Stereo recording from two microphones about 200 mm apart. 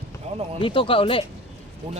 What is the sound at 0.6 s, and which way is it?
Speech, 25° left (ahead or behind).